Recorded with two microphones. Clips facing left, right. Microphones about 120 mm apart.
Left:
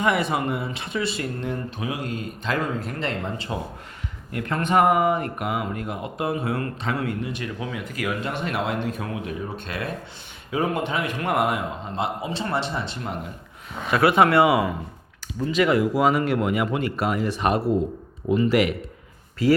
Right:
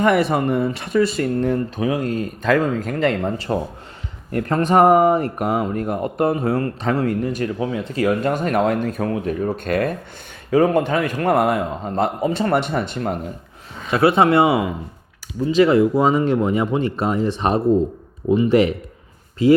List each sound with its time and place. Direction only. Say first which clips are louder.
0.0 s a man's voice: right 6 dB; 45° right (ahead or behind)
8.2 s a man's voice: right 8 dB; 45° right (ahead or behind)
13.9 s speech: right 3 dB; 25° right (ahead or behind)